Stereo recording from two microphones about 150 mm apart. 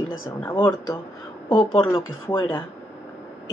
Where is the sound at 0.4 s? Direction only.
15° left (ahead or behind).